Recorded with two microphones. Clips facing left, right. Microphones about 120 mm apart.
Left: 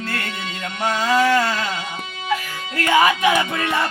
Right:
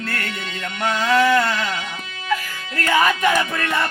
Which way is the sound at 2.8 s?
15° left (ahead or behind).